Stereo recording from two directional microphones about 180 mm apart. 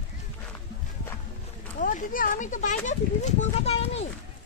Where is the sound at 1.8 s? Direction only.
50° left (ahead or behind).